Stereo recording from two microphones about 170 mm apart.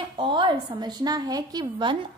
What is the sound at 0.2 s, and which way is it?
A woman's voice, 30° right (ahead or behind).